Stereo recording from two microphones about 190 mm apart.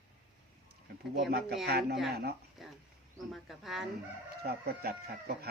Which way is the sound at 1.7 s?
55° right (ahead or behind).